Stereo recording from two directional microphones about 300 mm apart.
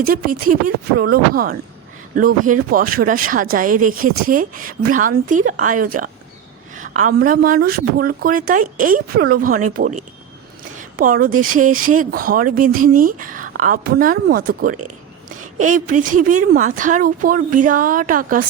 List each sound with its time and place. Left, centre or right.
0.1 s speech: right